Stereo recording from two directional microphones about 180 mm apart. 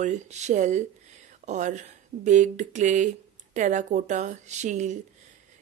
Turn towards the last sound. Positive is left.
turn(degrees=-40)  # may be behind; listen again after turning